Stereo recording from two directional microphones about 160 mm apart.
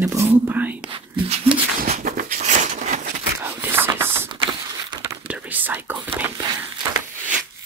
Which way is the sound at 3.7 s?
15° right (ahead or behind).